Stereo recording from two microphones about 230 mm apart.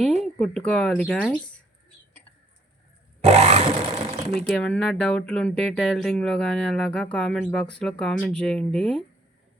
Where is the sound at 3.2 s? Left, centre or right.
Right.